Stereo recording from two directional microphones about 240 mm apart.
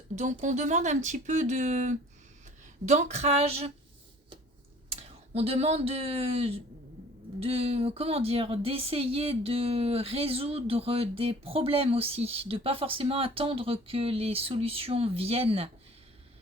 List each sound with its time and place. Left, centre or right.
0.2 s speech: right
4.9 s speech: right